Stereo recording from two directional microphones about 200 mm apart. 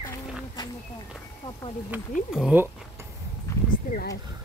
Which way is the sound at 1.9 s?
10° right (ahead or behind).